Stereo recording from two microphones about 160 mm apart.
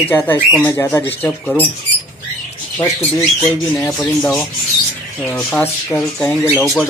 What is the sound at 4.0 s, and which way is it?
Speech, 5° left (ahead or behind).